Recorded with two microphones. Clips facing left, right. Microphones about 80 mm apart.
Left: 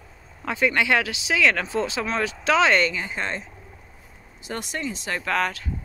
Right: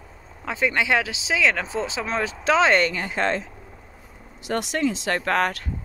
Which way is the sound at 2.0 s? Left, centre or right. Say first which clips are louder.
Right 1 dB; right.